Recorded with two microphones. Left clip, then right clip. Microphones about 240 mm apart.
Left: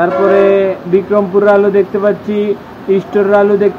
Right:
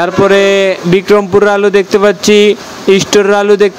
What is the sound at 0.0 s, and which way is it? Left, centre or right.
Speech, right.